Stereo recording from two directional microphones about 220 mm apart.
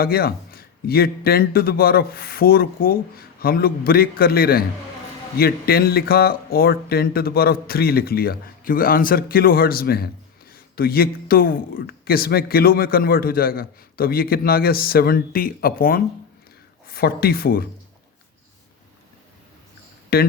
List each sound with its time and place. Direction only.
0.0 s a man's voice: 45° left (ahead or behind)
20.1 s a man's voice: 45° left (ahead or behind)